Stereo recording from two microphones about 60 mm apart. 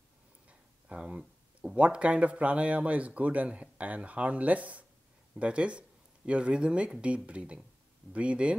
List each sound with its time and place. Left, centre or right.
0.5 s speech: right